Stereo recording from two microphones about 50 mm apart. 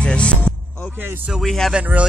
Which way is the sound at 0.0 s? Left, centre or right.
Left.